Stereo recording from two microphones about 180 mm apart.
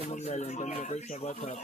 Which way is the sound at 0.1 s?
40° left (ahead or behind).